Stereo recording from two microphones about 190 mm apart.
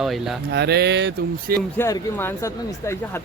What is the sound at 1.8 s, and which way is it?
Speech, 15° left (ahead or behind).